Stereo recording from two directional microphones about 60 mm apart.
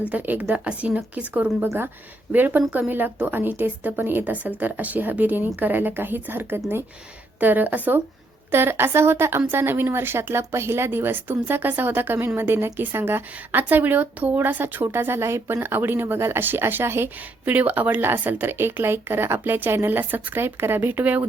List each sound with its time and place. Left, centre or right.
0.1 s a woman's voice: right
8.4 s a woman's voice: right
17.4 s a woman's voice: right